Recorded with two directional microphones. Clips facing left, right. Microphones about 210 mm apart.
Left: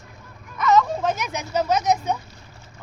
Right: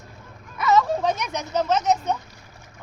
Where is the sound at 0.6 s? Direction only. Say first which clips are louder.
Left 1 dB; 5° right (ahead or behind).